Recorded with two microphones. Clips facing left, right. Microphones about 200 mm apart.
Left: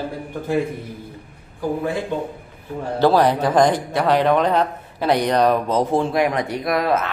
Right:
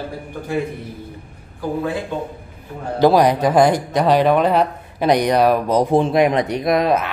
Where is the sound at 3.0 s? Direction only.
15° right (ahead or behind).